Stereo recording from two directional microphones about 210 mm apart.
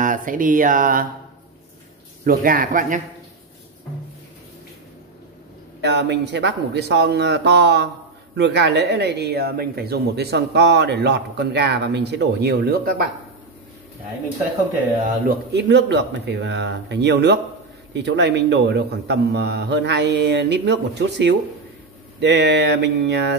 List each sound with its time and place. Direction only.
0.0 s a sound: 40° right (ahead or behind)
2.2 s speech: 45° right (ahead or behind)
5.8 s speech: 55° right (ahead or behind)
15.2 s a man's voice: 55° right (ahead or behind)